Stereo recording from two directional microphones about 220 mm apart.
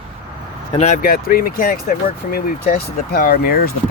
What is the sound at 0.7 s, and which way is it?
Speech, 30° left (ahead or behind).